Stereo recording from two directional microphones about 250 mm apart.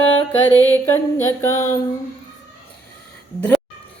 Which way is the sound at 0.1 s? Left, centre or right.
Left.